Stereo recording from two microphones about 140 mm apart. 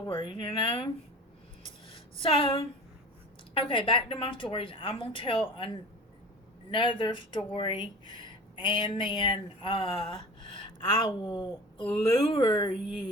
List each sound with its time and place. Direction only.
0.0 s speech: 35° left (ahead or behind)
2.2 s speech: 40° left (ahead or behind)